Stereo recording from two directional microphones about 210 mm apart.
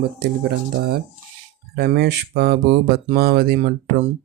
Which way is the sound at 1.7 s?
50° right (ahead or behind).